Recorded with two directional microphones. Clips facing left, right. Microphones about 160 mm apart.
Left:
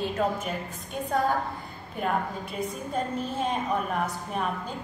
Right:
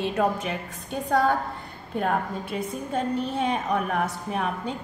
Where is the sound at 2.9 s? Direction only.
70° right (ahead or behind).